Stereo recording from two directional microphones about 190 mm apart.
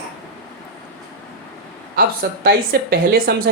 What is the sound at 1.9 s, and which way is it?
Speech, 55° right (ahead or behind).